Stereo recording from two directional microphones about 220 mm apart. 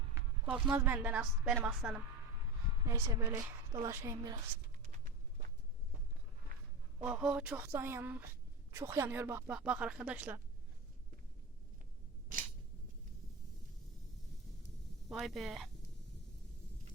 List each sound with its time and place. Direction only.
0.5 s speech: 5° right (ahead or behind)
6.5 s a sound: 40° right (ahead or behind)
7.1 s speech: 5° right (ahead or behind)
15.1 s speech: centre (ahead or behind)